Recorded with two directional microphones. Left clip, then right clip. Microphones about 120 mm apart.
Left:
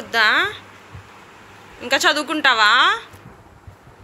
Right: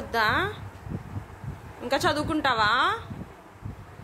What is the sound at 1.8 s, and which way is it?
A woman's voice, 5° right (ahead or behind).